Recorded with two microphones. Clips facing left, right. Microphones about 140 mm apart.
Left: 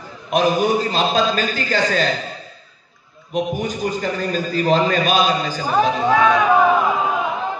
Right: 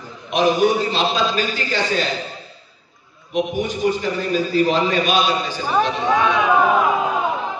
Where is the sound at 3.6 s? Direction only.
45° left (ahead or behind).